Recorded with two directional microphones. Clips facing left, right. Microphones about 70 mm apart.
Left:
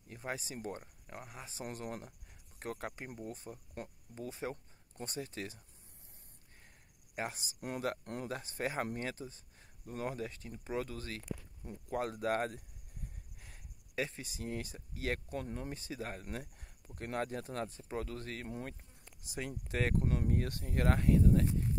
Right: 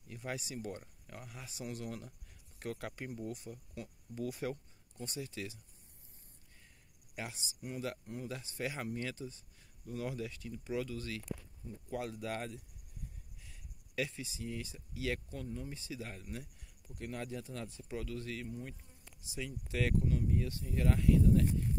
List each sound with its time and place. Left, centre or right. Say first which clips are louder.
0.1 s speech: even; left
4.1 s speech: right 3 dB; left
4.9 s speech: left 1 dB; left
7.2 s speech: left 4 dB; left
7.6 s speech: left 4 dB; left
8.0 s speech: left 2 dB; left
8.3 s speech: left 2 dB; left
13.9 s speech: even; left
14.2 s speech: left 1 dB; left
15.2 s speech: left 3 dB; left
15.7 s speech: left 3 dB; left
18.5 s speech: left 2 dB; left
19.2 s speech: left 2 dB; left